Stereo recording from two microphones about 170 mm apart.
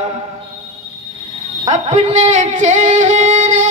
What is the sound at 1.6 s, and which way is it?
Music, 45° right (ahead or behind).